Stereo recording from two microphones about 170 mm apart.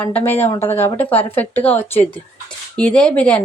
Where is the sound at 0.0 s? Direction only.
10° left (ahead or behind).